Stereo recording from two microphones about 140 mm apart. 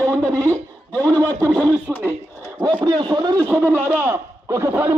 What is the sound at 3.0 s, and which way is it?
Speech, 30° right (ahead or behind).